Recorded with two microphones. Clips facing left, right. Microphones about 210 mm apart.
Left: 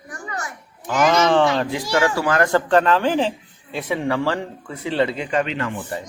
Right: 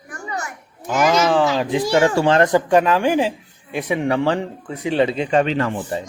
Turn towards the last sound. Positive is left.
turn(degrees=-35)  # may be behind; listen again after turning